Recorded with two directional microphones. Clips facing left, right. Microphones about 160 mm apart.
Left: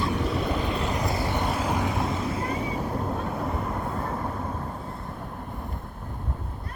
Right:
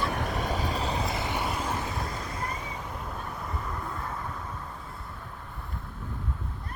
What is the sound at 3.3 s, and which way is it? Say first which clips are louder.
Train: left 7 dB; 50° left (ahead or behind).